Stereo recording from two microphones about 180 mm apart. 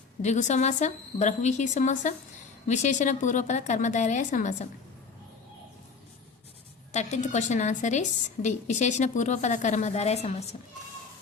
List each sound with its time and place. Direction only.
0.2 s a woman's voice: 40° left (ahead or behind)
6.9 s a woman's voice: 40° left (ahead or behind)